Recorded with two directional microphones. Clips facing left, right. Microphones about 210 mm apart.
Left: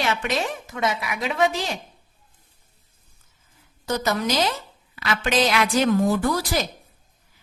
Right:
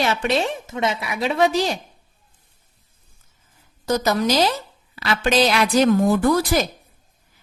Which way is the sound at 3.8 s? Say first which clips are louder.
Right 4 dB; 40° right (ahead or behind).